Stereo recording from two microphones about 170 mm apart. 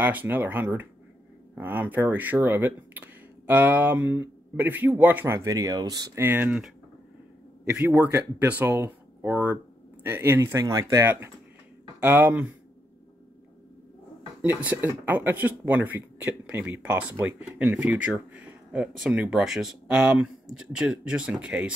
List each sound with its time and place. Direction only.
0.0 s speech: 10° right (ahead or behind)
7.7 s speech: 10° right (ahead or behind)
14.4 s speech: 10° right (ahead or behind)